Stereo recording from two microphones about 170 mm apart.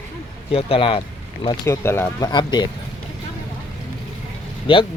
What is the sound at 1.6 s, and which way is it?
A man's voice, 15° left (ahead or behind).